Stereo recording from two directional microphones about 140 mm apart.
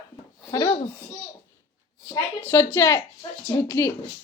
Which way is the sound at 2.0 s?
15° left (ahead or behind).